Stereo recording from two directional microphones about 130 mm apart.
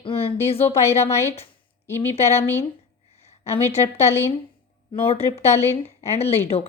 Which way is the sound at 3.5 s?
50° left (ahead or behind).